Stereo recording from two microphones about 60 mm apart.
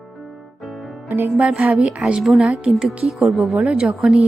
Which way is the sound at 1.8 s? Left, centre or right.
Centre.